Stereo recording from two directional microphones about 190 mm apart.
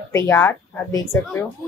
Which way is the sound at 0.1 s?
15° left (ahead or behind).